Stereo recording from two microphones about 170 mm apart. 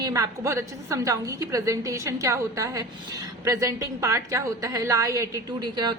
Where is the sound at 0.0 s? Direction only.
20° right (ahead or behind).